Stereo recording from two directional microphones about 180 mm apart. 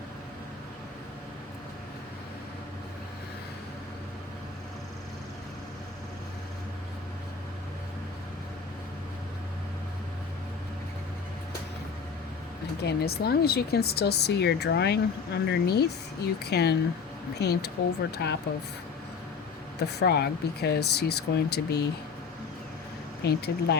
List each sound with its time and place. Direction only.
12.8 s speech: 65° left (ahead or behind)
19.8 s speech: 65° left (ahead or behind)
23.2 s speech: 65° left (ahead or behind)